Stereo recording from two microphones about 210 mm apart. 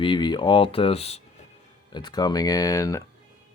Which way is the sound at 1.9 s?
20° left (ahead or behind).